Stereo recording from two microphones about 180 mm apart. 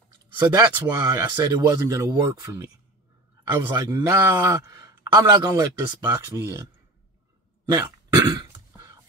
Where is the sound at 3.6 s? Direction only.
20° right (ahead or behind).